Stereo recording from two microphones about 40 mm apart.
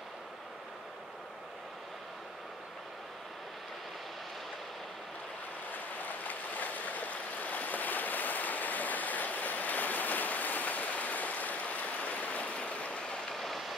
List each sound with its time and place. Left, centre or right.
5.7 s waves: left
13.2 s train: centre